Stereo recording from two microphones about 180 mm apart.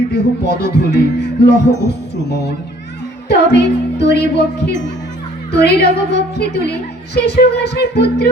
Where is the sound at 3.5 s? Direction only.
70° left (ahead or behind).